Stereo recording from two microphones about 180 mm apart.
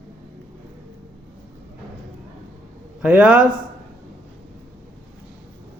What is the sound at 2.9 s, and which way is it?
Speech, 5° right (ahead or behind).